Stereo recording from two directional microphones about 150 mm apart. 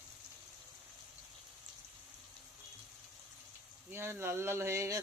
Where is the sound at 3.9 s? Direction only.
15° right (ahead or behind).